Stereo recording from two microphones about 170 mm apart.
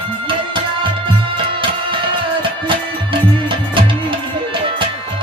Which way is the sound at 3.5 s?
30° right (ahead or behind).